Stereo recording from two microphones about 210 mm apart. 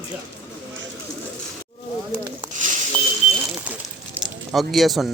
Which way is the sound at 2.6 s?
35° right (ahead or behind).